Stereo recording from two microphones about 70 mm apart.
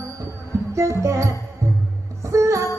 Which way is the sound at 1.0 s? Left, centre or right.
Right.